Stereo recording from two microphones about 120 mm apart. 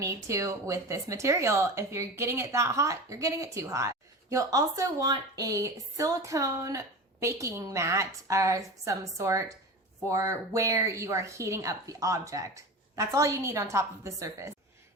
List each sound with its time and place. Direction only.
0.0 s speech: 25° right (ahead or behind)